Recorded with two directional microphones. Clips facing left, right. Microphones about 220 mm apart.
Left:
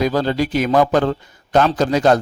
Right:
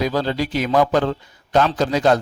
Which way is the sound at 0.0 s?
45° left (ahead or behind).